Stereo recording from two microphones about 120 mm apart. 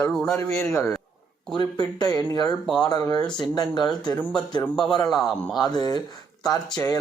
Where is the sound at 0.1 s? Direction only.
5° left (ahead or behind).